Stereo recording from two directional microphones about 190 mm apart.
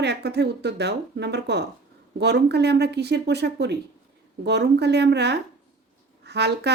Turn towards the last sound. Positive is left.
turn(degrees=-60)  # may be behind; listen again after turning